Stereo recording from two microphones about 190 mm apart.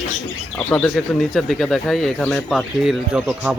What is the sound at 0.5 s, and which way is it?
Speech, 5° left (ahead or behind).